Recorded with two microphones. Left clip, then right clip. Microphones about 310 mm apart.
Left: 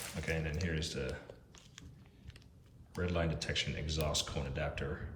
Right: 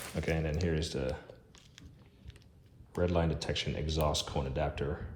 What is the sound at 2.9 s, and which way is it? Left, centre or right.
Speech, centre.